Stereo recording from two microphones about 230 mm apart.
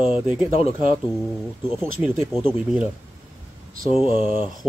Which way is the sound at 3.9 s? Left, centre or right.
Left.